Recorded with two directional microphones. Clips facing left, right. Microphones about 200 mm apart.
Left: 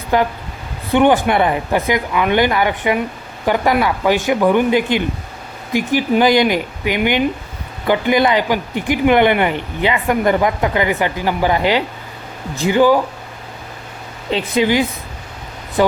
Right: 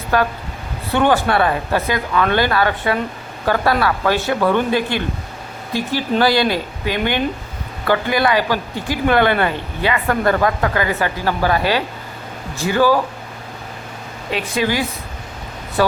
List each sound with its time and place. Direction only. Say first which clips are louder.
0.1 s speech: left 2 dB; 20° left (ahead or behind)
14.3 s speech: left 4 dB; 25° left (ahead or behind)